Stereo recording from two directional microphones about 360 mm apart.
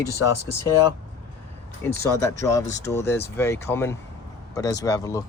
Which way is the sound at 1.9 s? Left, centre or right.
Centre.